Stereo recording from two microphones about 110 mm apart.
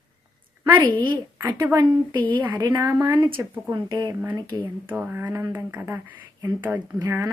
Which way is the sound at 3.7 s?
40° right (ahead or behind).